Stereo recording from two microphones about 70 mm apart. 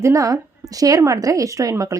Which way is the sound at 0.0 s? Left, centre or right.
Right.